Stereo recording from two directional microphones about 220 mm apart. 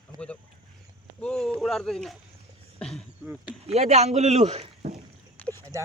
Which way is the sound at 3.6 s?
30° right (ahead or behind).